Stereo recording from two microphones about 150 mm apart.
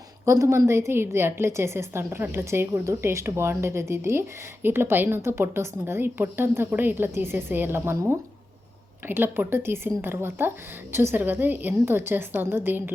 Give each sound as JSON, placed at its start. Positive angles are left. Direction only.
{"t": 0.3, "sound": "a woman's voice", "side_deg": -20}